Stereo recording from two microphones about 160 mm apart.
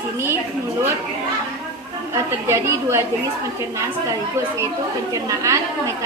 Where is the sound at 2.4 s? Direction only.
15° right (ahead or behind).